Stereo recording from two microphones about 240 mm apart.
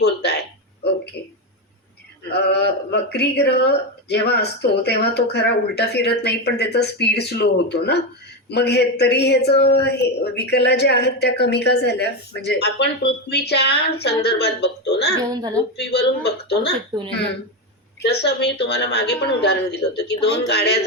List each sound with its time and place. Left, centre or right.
0.0 s a sound: left
2.5 s speech: left
15.3 s speech: centre
15.8 s speech: left
18.0 s speech: left